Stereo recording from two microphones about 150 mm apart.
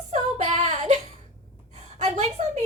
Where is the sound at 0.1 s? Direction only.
45° right (ahead or behind).